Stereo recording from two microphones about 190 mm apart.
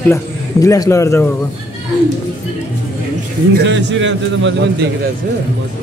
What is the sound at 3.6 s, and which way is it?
A man's voice, 70° right (ahead or behind).